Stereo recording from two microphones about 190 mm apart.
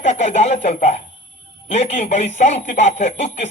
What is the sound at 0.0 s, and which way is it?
A man's voice, 35° left (ahead or behind).